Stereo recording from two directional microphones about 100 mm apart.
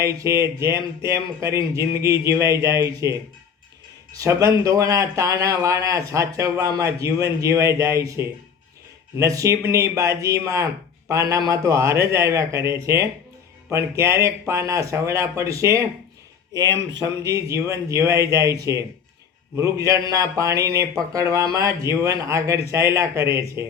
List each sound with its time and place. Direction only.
0.0 s speech: 30° right (ahead or behind)